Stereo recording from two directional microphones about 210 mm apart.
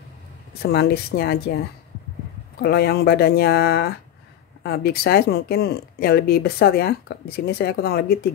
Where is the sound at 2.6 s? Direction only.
50° left (ahead or behind).